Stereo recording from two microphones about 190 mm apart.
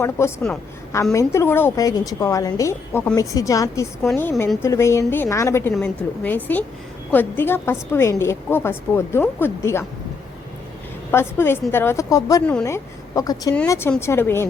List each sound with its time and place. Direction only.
0.0 s a woman's voice: 15° left (ahead or behind)
11.1 s a woman's voice: 10° left (ahead or behind)